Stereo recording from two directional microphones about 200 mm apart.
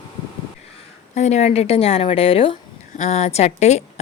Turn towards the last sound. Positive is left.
turn(degrees=35)  # may be behind; listen again after turning